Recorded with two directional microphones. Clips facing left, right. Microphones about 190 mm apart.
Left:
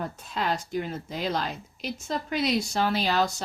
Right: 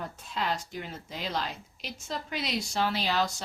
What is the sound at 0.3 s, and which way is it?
Speech, 45° left (ahead or behind).